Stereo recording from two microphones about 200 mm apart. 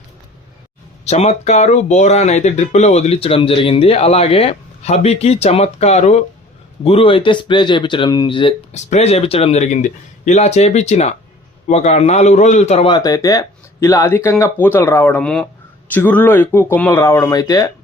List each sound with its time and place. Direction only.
1.0 s speech: 35° left (ahead or behind); by 17.7 s 15° left (ahead or behind)